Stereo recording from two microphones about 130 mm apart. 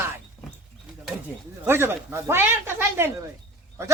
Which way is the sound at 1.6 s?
20° right (ahead or behind).